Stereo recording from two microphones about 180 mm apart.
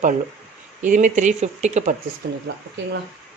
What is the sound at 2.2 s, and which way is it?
Speech, 65° right (ahead or behind).